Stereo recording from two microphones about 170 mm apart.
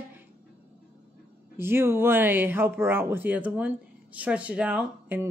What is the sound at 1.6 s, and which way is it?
Speech, 15° right (ahead or behind).